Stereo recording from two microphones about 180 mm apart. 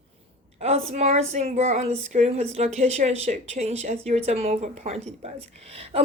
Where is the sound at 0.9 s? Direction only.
35° right (ahead or behind).